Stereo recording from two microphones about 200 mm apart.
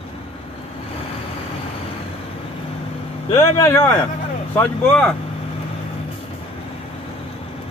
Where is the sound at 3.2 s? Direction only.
20° left (ahead or behind).